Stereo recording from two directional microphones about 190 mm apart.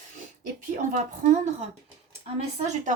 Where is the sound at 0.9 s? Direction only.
40° right (ahead or behind).